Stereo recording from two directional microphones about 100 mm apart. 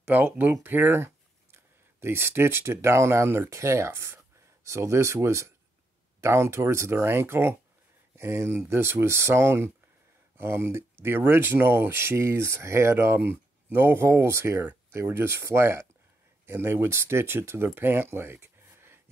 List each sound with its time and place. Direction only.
0.0 s speech: 20° right (ahead or behind)